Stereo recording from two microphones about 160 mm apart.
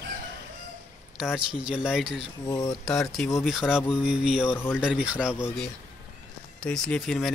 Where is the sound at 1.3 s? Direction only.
5° right (ahead or behind).